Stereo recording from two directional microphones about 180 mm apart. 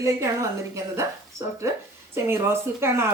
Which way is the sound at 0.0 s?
15° right (ahead or behind).